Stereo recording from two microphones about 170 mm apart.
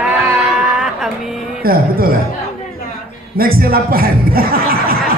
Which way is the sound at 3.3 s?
60° right (ahead or behind).